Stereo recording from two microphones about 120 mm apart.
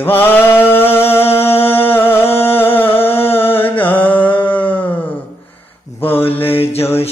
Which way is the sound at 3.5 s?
15° left (ahead or behind).